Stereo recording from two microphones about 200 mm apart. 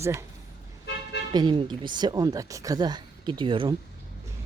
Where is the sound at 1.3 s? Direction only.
20° right (ahead or behind).